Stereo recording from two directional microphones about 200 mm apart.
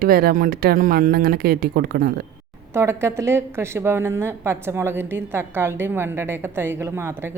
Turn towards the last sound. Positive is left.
turn(degrees=-10)  # may be behind; listen again after turning